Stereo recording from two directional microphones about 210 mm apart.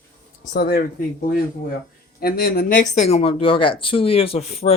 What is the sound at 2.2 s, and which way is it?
Speech, 45° left (ahead or behind).